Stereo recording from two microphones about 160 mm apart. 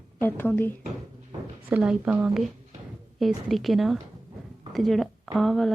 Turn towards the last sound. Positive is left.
turn(degrees=0)  # may be behind; listen again after turning